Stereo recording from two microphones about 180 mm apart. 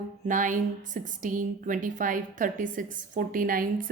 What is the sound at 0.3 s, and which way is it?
A woman's voice, 45° right (ahead or behind).